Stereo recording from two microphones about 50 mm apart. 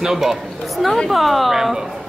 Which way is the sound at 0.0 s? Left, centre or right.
Centre.